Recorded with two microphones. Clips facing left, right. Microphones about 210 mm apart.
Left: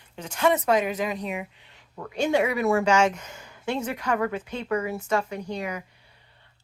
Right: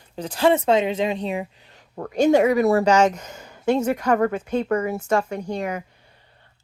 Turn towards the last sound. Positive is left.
turn(degrees=-50)  # may be behind; listen again after turning